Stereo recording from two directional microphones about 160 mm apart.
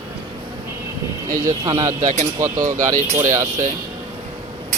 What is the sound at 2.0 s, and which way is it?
Speech, 45° right (ahead or behind).